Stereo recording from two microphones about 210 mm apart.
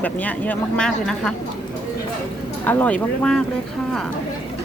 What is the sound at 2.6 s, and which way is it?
Speech, 10° left (ahead or behind).